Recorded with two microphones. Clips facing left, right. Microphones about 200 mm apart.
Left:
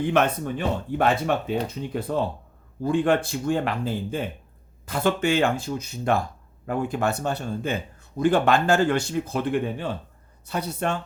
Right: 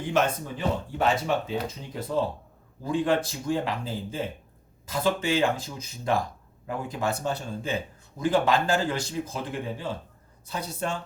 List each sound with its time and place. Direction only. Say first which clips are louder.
0.1 s speech: right 2 dB; 60° left (ahead or behind)